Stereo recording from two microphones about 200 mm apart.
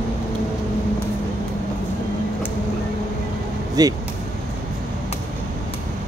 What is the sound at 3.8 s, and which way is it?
Speech, 20° right (ahead or behind).